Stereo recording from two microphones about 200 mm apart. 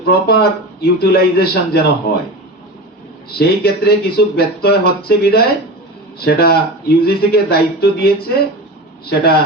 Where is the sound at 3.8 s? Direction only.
50° left (ahead or behind).